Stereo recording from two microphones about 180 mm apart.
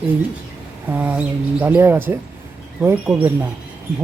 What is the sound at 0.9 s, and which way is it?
Speech, 10° right (ahead or behind).